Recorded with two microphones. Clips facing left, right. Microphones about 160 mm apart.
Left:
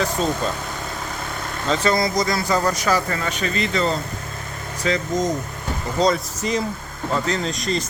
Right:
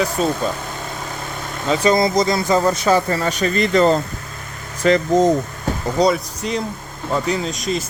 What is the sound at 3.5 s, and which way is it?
Speech, 50° right (ahead or behind).